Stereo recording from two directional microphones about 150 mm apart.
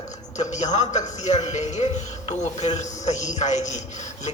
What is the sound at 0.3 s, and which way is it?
A man's voice, 50° left (ahead or behind).